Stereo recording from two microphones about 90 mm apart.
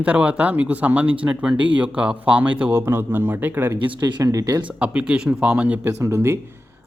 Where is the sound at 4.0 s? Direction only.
55° right (ahead or behind).